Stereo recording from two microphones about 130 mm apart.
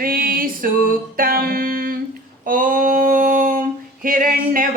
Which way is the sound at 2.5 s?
90° right.